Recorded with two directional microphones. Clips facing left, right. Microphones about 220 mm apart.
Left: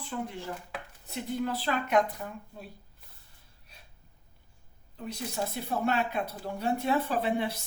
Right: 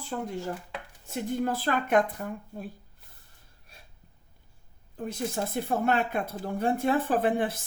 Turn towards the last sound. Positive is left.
turn(degrees=-50)  # may be behind; listen again after turning